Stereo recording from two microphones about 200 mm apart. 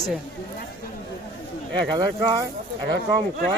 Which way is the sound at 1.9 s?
20° right (ahead or behind).